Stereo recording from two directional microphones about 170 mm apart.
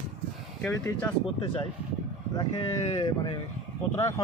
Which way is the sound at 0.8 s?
10° left (ahead or behind).